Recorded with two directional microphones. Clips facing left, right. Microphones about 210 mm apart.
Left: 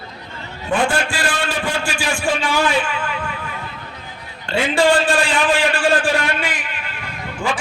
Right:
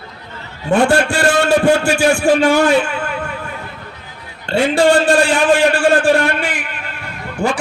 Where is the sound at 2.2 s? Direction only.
45° right (ahead or behind).